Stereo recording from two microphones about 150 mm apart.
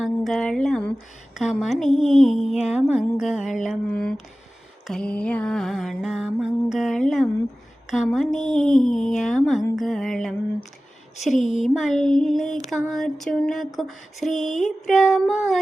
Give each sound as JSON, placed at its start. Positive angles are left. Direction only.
{"t": 0.0, "sound": "a sound", "side_deg": 0}
{"t": 1.6, "sound": "music", "side_deg": 0}
{"t": 8.2, "sound": "speech", "side_deg": 55}
{"t": 8.6, "sound": "music", "side_deg": 5}